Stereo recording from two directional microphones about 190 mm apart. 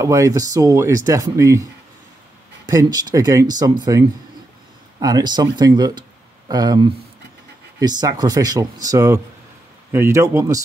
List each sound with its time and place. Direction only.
0.0 s speech: 15° right (ahead or behind)
2.7 s speech: 20° right (ahead or behind)
5.0 s speech: 20° right (ahead or behind)